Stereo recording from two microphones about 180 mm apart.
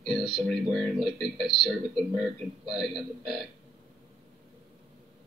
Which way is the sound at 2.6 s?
Centre (ahead or behind).